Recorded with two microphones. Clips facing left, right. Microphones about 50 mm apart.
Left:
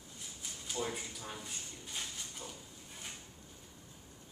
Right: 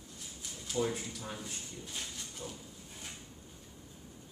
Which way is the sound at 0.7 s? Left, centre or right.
Centre.